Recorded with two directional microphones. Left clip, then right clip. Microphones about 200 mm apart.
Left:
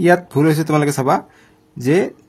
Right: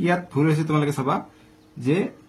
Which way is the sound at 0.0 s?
50° left (ahead or behind).